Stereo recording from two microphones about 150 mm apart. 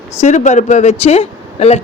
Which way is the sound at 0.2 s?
50° left (ahead or behind).